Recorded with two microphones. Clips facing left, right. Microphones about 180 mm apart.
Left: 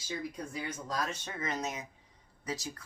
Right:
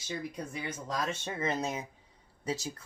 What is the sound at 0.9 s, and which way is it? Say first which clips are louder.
Speech: right 4 dB; 25° right (ahead or behind).